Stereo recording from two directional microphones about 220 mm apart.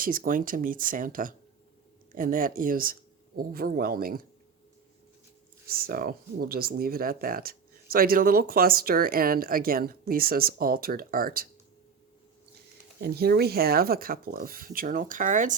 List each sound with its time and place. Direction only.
0.0 s speech: 40° right (ahead or behind)
5.6 s speech: 40° right (ahead or behind)
13.0 s speech: 45° right (ahead or behind)